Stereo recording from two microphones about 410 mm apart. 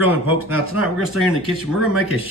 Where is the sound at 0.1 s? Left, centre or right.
Centre.